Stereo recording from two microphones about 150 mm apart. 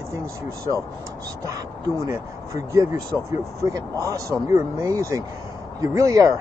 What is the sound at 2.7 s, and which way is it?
Speech, 20° right (ahead or behind).